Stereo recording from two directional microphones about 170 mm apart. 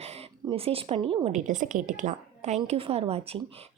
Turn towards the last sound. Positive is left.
turn(degrees=-35)  # may be behind; listen again after turning